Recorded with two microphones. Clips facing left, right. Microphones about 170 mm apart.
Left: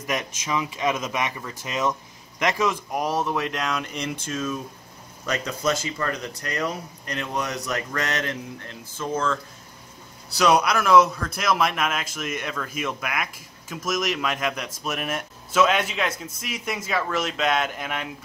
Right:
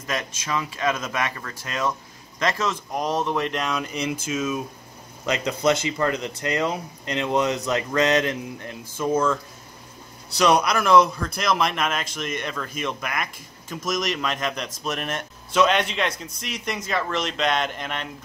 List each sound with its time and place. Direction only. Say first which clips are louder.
0.0 s speech: left 1 dB; 15° left (ahead or behind); by 4.6 s 5° right (ahead or behind)
5.2 s speech: right 4 dB; 20° right (ahead or behind)
10.3 s a man's voice: even; 5° left (ahead or behind)